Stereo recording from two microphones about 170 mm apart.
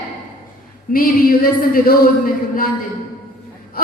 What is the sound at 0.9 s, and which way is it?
A woman's voice, 60° left (ahead or behind).